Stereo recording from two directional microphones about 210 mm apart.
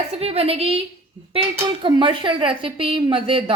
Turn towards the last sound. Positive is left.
turn(degrees=-25)  # may be behind; listen again after turning